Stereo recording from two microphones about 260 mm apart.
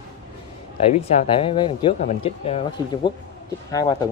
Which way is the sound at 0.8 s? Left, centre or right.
Left.